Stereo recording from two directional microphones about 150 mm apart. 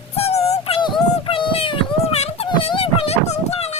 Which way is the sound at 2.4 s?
30° left (ahead or behind).